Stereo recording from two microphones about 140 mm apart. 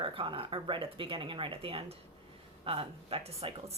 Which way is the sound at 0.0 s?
40° right (ahead or behind).